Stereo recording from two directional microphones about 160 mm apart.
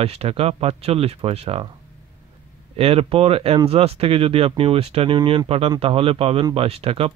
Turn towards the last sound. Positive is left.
turn(degrees=-40)  # may be behind; listen again after turning